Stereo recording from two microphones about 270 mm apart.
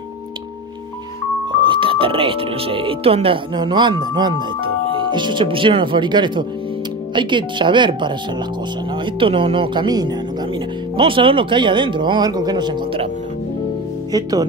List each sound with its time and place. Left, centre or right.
1.5 s speech: centre
14.1 s speech: centre